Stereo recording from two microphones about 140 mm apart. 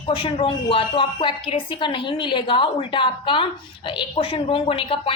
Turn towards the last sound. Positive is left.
turn(degrees=40)  # may be behind; listen again after turning